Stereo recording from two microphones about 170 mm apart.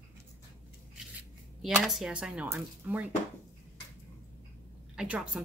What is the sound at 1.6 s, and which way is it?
Speech, centre (ahead or behind).